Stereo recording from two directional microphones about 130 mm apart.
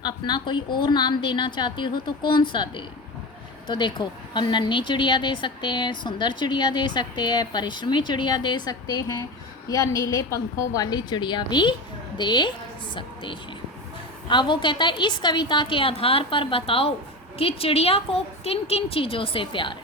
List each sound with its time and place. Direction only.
0.0 s a woman's voice: 35° left (ahead or behind)